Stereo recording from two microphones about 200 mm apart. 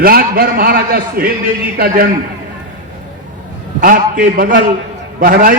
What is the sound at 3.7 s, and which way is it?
A man's voice, 40° right (ahead or behind).